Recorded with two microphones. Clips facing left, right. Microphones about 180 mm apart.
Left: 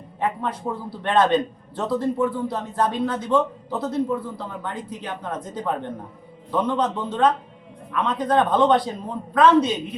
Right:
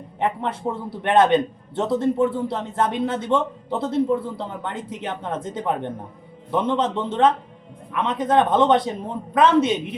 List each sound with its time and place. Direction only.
0.2 s a man's voice: 25° right (ahead or behind)